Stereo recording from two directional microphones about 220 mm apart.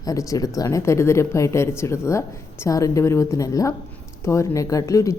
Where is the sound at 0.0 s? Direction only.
15° left (ahead or behind).